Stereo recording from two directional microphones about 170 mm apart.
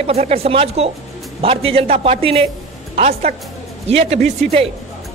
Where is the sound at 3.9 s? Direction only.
35° right (ahead or behind).